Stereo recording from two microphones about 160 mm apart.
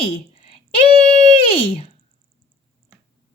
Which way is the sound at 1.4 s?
35° left (ahead or behind).